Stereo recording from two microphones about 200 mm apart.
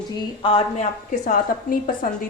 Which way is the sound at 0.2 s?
25° left (ahead or behind).